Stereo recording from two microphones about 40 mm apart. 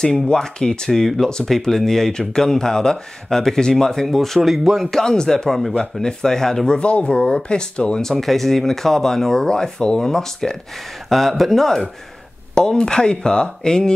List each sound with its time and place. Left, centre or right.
0.0 s speech: centre
4.0 s speech: centre
5.0 s speech: centre
6.7 s speech: left
8.0 s speech: centre
12.5 s speech: centre